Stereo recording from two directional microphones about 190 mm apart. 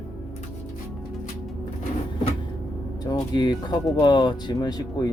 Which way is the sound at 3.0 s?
20° left (ahead or behind).